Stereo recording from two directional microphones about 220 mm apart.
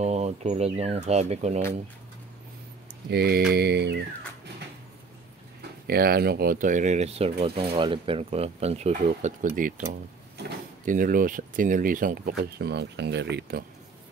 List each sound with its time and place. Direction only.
0.0 s speech: 30° right (ahead or behind)
3.1 s a sound: 45° right (ahead or behind)
5.9 s speech: 45° right (ahead or behind)
10.9 s speech: 40° right (ahead or behind)